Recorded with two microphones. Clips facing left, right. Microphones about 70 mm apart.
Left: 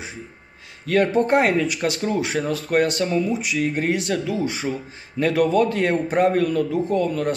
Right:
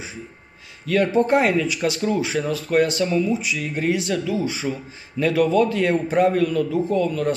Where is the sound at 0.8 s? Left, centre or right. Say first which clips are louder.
Even; left.